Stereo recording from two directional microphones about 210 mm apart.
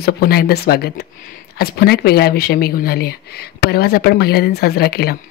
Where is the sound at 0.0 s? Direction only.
45° left (ahead or behind).